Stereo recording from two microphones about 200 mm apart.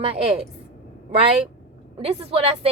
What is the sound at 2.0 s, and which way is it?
Speech, 30° right (ahead or behind).